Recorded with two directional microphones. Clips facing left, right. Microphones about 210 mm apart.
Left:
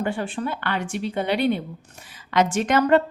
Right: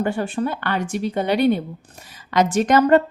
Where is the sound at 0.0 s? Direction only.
40° right (ahead or behind).